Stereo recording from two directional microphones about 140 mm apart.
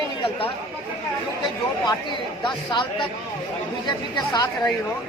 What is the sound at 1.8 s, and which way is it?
Speech, 35° left (ahead or behind).